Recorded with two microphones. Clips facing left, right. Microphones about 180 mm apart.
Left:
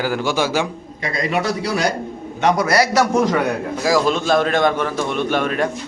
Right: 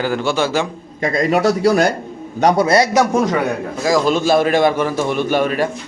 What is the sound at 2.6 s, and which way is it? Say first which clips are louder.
Speech: right 3 dB; 20° right (ahead or behind).